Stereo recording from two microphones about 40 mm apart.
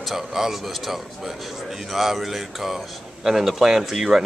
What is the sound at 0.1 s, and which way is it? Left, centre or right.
A man's voice, centre.